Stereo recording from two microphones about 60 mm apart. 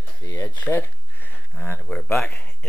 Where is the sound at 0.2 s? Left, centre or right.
Left.